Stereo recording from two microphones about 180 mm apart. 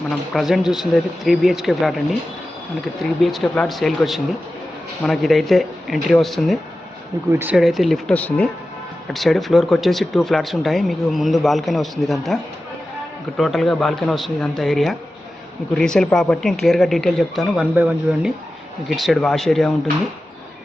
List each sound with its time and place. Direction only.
0.3 s speech: centre (ahead or behind)